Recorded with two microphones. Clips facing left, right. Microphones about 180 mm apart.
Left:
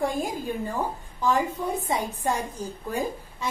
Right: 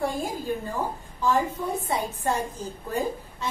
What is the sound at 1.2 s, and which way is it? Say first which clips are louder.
A woman's voice: even; 15° left (ahead or behind).